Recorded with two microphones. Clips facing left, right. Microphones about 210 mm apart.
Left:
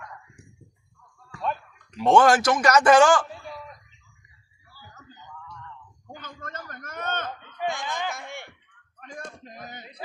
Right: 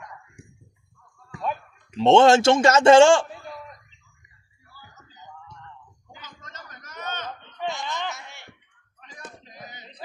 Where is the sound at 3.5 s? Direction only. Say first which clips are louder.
Even; centre (ahead or behind).